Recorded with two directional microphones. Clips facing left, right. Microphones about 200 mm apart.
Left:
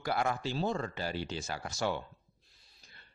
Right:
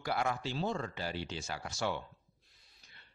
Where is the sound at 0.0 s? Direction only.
45° left (ahead or behind).